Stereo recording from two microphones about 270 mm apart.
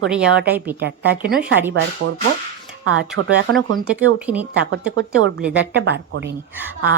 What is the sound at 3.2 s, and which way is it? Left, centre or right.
Speech, right.